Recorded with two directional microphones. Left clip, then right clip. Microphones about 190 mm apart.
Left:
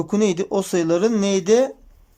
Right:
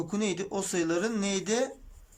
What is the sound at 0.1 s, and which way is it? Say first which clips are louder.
Speech: left 15 dB; 30° left (ahead or behind).